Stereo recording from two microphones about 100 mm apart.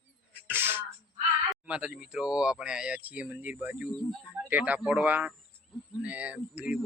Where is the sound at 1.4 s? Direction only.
10° right (ahead or behind).